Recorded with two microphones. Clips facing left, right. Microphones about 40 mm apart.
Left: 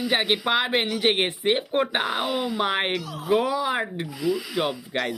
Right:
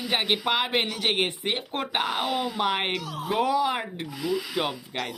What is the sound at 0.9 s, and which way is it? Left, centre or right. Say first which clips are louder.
Speech: left 3 dB; centre.